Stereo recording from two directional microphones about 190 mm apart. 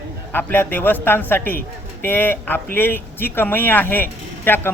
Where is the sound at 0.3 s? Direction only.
10° left (ahead or behind).